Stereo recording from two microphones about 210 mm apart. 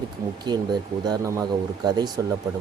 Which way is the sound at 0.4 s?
20° right (ahead or behind).